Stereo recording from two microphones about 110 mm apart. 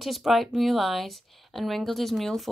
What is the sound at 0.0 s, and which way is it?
Speech, centre (ahead or behind).